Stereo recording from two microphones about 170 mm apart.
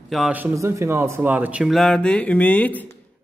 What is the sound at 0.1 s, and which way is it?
Speech, 5° right (ahead or behind).